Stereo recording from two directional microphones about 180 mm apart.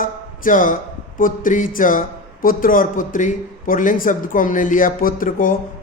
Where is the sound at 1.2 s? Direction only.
50° left (ahead or behind).